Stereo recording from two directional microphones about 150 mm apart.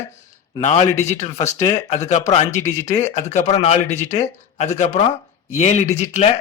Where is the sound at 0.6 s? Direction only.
50° left (ahead or behind).